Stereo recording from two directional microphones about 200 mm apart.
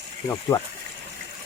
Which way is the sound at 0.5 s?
15° left (ahead or behind).